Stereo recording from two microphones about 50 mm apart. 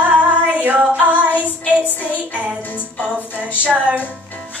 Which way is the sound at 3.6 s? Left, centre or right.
Right.